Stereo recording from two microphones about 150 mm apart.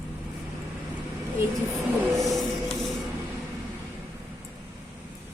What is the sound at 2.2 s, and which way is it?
Printer, centre (ahead or behind).